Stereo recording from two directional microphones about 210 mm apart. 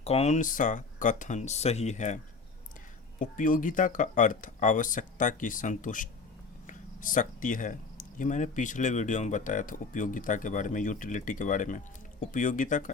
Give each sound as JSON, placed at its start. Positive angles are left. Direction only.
{"t": 0.0, "sound": "speech", "side_deg": 30}
{"t": 3.2, "sound": "speech", "side_deg": 40}